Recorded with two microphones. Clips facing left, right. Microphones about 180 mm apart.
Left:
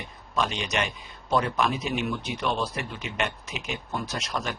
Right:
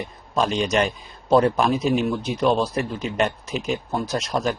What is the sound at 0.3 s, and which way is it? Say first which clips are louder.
Speech: right 7 dB; 35° right (ahead or behind).